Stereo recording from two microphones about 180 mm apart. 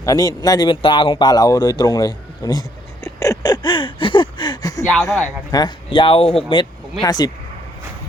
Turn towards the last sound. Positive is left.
turn(degrees=25)  # may be behind; listen again after turning